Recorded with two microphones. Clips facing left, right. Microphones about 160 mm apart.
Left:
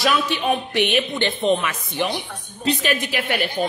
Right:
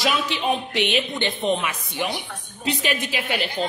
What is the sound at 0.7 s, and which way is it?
Speech, 55° left (ahead or behind).